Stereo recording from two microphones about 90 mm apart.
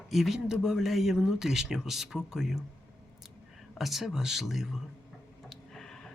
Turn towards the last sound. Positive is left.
turn(degrees=5)  # may be behind; listen again after turning